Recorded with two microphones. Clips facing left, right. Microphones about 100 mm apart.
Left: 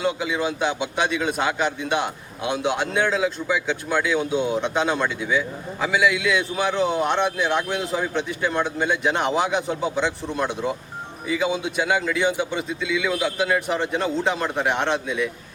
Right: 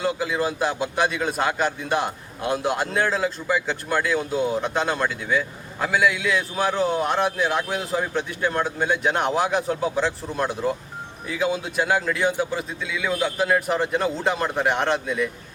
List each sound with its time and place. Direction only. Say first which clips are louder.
0.0 s a man's voice: even; centre (ahead or behind)